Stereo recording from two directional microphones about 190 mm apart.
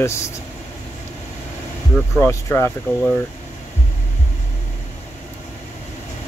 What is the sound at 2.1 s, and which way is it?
Speech, 10° left (ahead or behind).